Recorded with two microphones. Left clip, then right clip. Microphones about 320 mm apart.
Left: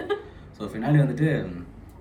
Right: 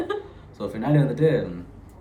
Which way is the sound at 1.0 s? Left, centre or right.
Centre.